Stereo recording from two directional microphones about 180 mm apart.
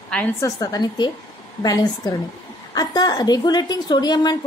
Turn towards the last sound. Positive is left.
turn(degrees=20)  # may be behind; listen again after turning